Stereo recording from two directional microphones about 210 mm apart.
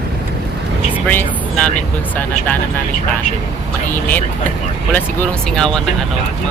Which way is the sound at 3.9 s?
10° left (ahead or behind).